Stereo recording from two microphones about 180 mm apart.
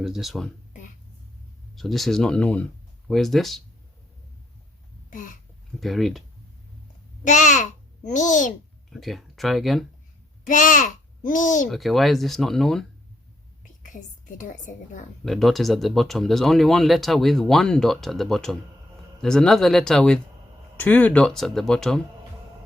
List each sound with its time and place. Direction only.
0.0 s speech: centre (ahead or behind)
1.7 s speech: centre (ahead or behind)
5.1 s a sound: 50° left (ahead or behind)
5.8 s speech: centre (ahead or behind)
7.3 s a child's voice: 40° left (ahead or behind)
8.9 s speech: centre (ahead or behind)
10.4 s a child's voice: 45° left (ahead or behind)
11.7 s speech: centre (ahead or behind)
13.6 s whispering: 45° left (ahead or behind)
15.2 s speech: centre (ahead or behind)